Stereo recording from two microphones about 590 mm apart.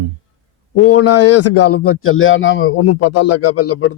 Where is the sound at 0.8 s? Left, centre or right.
Left.